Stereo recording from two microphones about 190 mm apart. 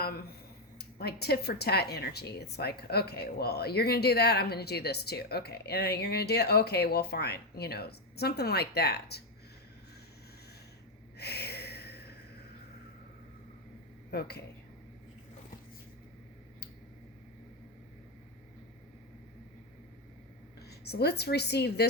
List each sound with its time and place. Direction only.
0.8 s speech: 55° left (ahead or behind)
11.2 s a sound: 60° left (ahead or behind)
14.1 s speech: 55° left (ahead or behind)
20.6 s a woman's voice: 60° left (ahead or behind)